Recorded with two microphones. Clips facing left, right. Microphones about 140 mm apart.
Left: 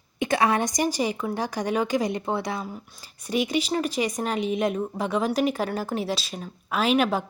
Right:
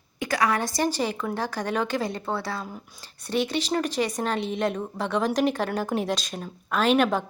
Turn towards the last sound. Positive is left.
turn(degrees=10)  # may be behind; listen again after turning